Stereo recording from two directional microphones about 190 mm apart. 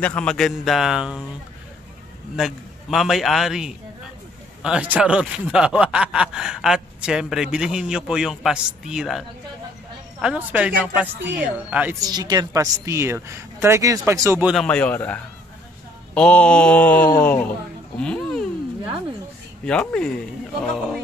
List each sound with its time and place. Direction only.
0.0 s speech: 5° left (ahead or behind)
2.3 s speech: centre (ahead or behind)
10.2 s a woman's voice: 5° right (ahead or behind)
12.0 s a woman's voice: 20° right (ahead or behind)
14.5 s mantra: 5° left (ahead or behind)
17.9 s a sound: 5° left (ahead or behind)
19.6 s speech: 5° left (ahead or behind)